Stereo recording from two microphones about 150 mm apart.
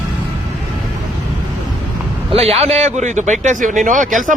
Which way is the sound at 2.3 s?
40° right (ahead or behind).